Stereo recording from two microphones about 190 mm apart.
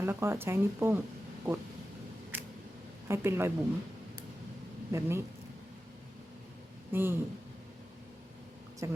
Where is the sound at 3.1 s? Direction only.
15° right (ahead or behind).